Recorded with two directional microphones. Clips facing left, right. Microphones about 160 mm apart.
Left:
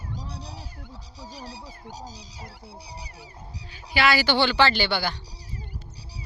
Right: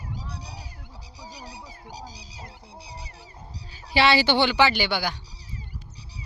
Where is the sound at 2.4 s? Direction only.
5° left (ahead or behind).